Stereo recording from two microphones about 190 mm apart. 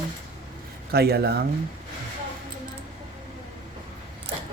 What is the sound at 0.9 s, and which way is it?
Speech, 55° right (ahead or behind).